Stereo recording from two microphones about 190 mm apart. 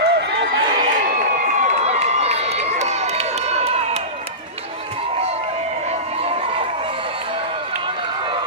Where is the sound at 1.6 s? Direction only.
35° right (ahead or behind).